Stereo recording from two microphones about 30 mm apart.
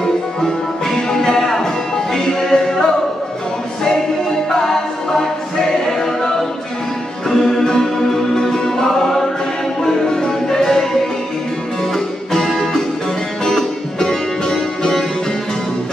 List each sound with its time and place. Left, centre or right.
0.0 s music: centre
4.6 s music: centre
5.9 s a capella: centre
7.2 s music: centre
13.4 s music: left